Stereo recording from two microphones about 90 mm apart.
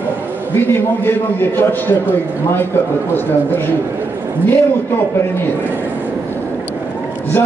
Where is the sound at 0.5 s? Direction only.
25° left (ahead or behind).